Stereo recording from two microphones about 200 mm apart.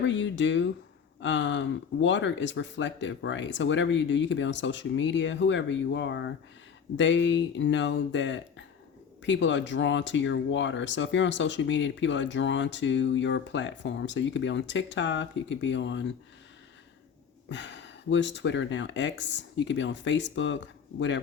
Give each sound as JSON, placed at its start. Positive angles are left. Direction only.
{"t": 0.0, "sound": "speech", "side_deg": 65}
{"t": 17.5, "sound": "speech", "side_deg": 65}